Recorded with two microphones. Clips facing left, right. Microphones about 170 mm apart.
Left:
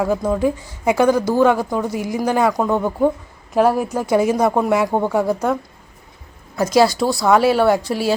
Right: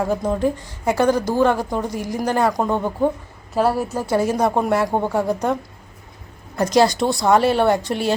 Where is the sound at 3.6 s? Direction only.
10° left (ahead or behind).